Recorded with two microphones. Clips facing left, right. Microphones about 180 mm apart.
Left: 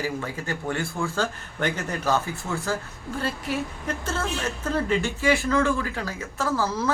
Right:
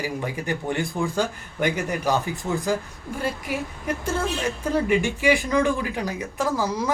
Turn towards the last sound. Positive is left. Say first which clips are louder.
# right 1 dB
turn(degrees=-15)  # may be behind; listen again after turning